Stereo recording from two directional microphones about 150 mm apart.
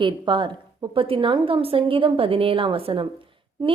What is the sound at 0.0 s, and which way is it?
A woman's voice, 35° right (ahead or behind).